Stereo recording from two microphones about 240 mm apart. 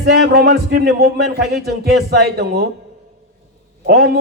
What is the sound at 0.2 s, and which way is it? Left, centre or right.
A man's voice, right.